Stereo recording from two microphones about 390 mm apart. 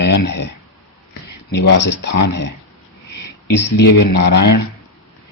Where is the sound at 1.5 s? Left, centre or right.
Left.